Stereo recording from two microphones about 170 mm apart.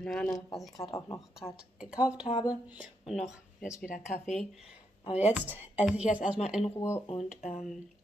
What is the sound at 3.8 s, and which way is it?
Speech, 50° left (ahead or behind).